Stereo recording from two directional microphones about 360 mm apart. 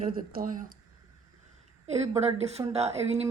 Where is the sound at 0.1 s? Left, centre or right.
Right.